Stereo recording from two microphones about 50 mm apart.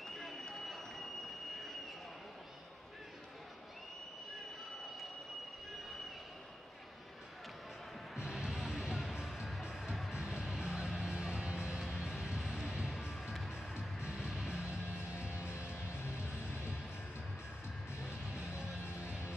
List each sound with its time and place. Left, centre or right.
0.0 s a sound: centre
8.2 s music: centre
10.1 s music: centre
12.4 s music: centre
15.1 s music: left
18.9 s music: left